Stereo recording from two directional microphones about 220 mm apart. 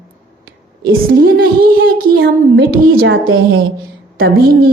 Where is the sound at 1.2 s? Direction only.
40° right (ahead or behind).